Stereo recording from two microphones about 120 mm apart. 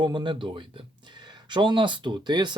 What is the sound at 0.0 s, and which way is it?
Speech, 40° right (ahead or behind).